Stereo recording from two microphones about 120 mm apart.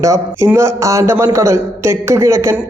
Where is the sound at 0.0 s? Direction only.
25° right (ahead or behind).